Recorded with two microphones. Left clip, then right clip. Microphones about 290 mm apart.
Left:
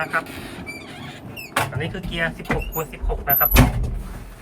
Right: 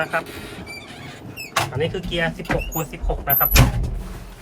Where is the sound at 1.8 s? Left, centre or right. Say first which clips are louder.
Right 3 dB; centre.